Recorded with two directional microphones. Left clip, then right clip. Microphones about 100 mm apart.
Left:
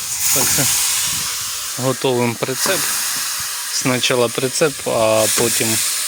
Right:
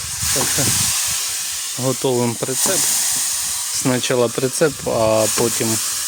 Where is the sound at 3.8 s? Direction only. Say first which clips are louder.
Left 1 dB; 30° right (ahead or behind).